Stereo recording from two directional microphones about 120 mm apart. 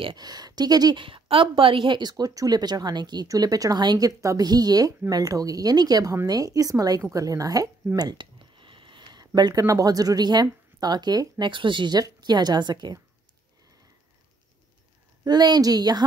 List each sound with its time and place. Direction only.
0.0 s a woman's voice: 35° right (ahead or behind)
15.2 s a woman's voice: 35° right (ahead or behind)